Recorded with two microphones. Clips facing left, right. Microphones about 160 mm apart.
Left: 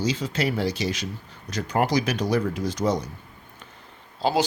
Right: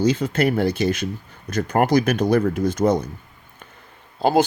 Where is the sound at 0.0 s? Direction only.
55° right (ahead or behind).